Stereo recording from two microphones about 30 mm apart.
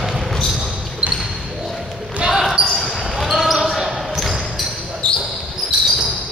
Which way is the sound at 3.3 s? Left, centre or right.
Centre.